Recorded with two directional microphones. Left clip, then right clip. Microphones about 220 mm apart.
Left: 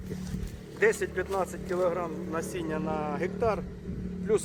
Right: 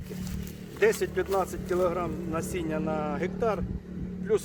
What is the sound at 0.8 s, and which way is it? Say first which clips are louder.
Speech: right 1 dB; 40° right (ahead or behind).